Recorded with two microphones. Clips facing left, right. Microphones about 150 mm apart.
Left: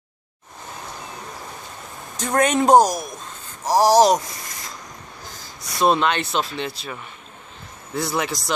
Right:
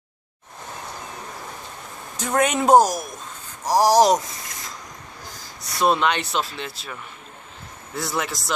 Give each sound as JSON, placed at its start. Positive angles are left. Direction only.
{"t": 2.1, "sound": "a man's voice", "side_deg": -5}
{"t": 5.8, "sound": "speech", "side_deg": 25}
{"t": 6.0, "sound": "a man's voice", "side_deg": -10}
{"t": 8.0, "sound": "a man's voice", "side_deg": 0}